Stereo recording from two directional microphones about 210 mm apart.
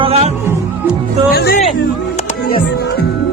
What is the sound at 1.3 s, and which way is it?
Speech, 45° left (ahead or behind).